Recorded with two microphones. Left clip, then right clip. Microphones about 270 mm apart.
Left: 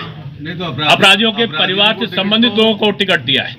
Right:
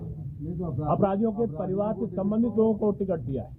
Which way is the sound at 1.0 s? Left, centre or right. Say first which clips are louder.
Left 15 dB; left.